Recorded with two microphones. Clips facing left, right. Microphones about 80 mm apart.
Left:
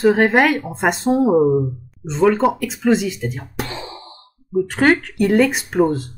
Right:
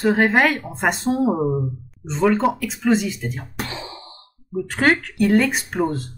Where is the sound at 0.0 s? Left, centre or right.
Centre.